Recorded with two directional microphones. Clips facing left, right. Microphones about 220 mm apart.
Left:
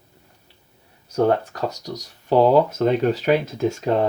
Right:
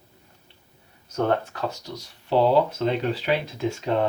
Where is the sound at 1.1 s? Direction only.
40° left (ahead or behind).